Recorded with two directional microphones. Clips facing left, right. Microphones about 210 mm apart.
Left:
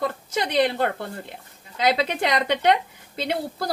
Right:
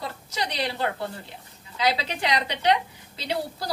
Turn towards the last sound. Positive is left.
turn(degrees=50)  # may be behind; listen again after turning